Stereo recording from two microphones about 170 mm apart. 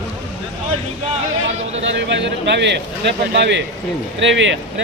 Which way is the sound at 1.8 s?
90° right.